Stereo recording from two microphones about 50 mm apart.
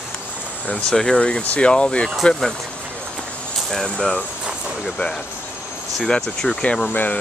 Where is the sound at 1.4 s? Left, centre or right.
Left.